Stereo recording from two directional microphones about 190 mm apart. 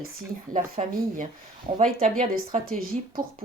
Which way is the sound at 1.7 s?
40° right (ahead or behind).